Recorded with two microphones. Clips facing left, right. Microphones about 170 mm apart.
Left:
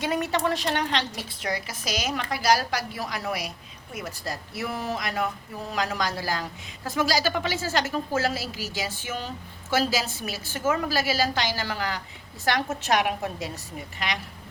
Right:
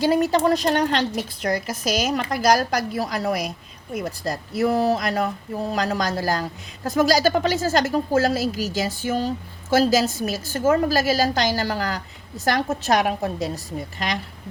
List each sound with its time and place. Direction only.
0.0 s a woman's voice: 35° right (ahead or behind)